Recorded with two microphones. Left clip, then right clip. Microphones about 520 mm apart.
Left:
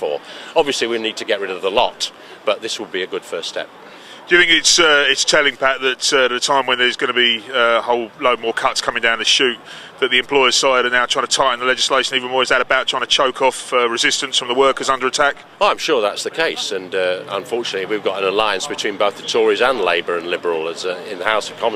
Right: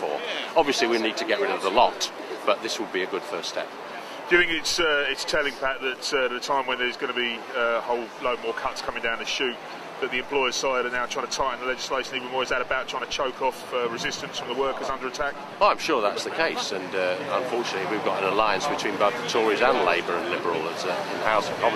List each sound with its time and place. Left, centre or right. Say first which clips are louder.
0.6 s speech: left 5 dB; left